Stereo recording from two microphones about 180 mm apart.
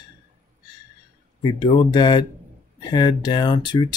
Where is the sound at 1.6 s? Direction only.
25° left (ahead or behind).